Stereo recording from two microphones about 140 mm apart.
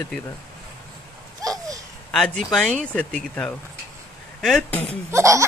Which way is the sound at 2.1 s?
5° left (ahead or behind).